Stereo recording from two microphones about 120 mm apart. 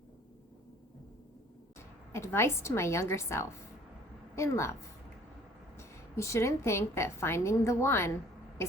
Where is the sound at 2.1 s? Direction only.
20° left (ahead or behind).